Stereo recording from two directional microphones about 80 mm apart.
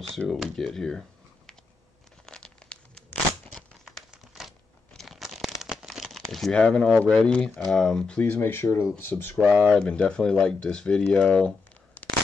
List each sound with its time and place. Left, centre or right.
0.3 s speech: centre
2.2 s tearing: centre
4.1 s crumpling: centre
4.9 s a sound: centre
6.3 s speech: centre
8.2 s speech: left
9.5 s speech: centre